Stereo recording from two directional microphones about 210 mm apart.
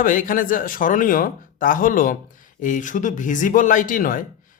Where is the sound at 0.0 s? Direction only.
40° left (ahead or behind).